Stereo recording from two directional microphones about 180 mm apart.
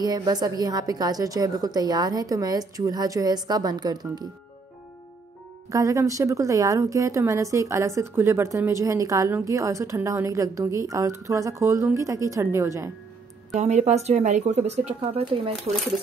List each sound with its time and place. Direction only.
0.0 s a woman's voice: 20° right (ahead or behind)
5.7 s speech: 20° right (ahead or behind)
13.6 s speech: 40° right (ahead or behind)